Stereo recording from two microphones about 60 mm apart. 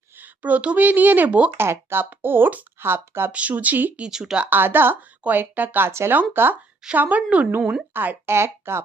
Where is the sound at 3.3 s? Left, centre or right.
Right.